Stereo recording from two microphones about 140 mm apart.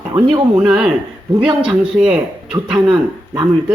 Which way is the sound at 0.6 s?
5° right (ahead or behind).